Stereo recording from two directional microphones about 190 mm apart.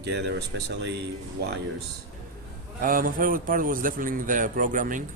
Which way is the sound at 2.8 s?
45° right (ahead or behind).